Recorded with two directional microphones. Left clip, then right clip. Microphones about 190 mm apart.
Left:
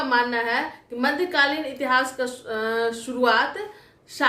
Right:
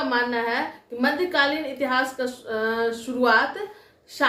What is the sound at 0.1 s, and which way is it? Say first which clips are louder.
A woman's voice: left 4 dB; 20° left (ahead or behind).